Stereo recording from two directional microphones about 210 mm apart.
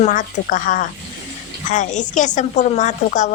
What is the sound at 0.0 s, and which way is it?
A woman's voice, 40° left (ahead or behind).